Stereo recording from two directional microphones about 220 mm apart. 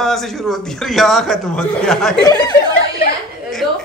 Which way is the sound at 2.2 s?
15° left (ahead or behind).